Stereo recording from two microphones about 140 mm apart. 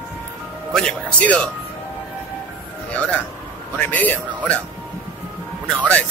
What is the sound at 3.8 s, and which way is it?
Speech, 10° left (ahead or behind).